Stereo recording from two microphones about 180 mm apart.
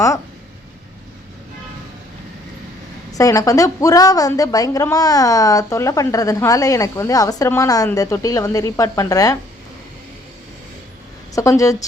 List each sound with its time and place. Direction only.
3.1 s a woman's voice: 20° left (ahead or behind)
11.3 s a woman's voice: 20° left (ahead or behind)